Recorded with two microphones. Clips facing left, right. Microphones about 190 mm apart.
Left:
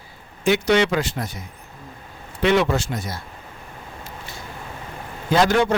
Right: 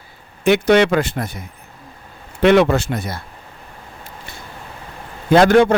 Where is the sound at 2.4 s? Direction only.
60° right (ahead or behind).